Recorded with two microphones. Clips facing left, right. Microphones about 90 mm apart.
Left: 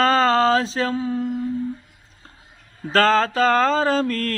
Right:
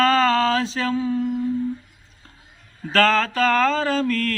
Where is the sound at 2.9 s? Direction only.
30° left (ahead or behind).